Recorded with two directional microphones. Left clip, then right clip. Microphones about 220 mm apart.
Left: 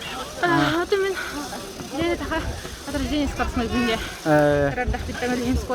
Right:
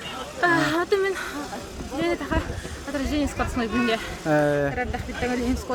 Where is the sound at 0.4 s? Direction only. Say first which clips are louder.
Even; 15° right (ahead or behind).